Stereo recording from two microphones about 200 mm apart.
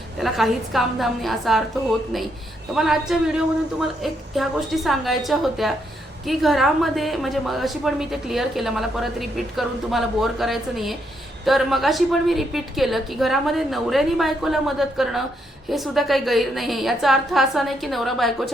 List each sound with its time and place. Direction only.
0.2 s a woman's voice: centre (ahead or behind)
2.7 s a woman's voice: centre (ahead or behind)